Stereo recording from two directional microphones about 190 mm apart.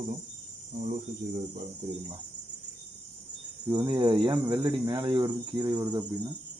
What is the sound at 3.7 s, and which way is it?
Speech, 25° right (ahead or behind).